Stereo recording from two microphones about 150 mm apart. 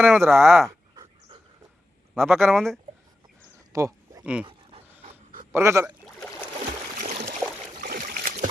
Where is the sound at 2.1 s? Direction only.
Centre (ahead or behind).